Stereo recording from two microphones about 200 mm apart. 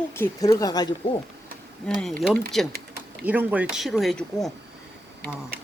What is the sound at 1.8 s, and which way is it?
Speech, 5° left (ahead or behind).